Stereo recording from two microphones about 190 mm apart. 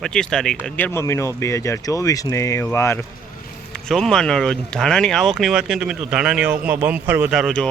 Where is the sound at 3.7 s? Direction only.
5° left (ahead or behind).